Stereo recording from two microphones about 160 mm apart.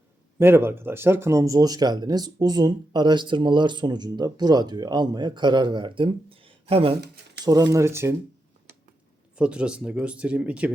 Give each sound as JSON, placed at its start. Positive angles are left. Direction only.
{"t": 0.3, "sound": "speech", "side_deg": -15}
{"t": 7.4, "sound": "speech", "side_deg": -25}
{"t": 9.4, "sound": "speech", "side_deg": -5}